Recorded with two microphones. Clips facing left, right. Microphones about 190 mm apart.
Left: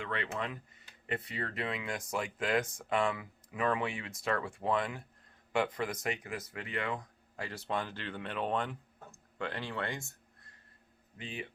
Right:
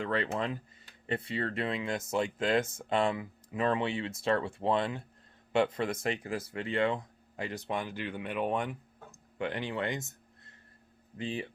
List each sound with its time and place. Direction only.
0.0 s speech: 35° right (ahead or behind); by 10.5 s 20° right (ahead or behind)
11.2 s speech: 30° right (ahead or behind)